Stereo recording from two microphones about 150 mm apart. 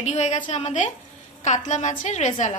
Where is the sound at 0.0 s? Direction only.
50° left (ahead or behind).